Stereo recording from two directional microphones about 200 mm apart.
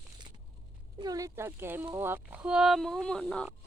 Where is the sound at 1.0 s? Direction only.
20° right (ahead or behind); by 3.5 s centre (ahead or behind).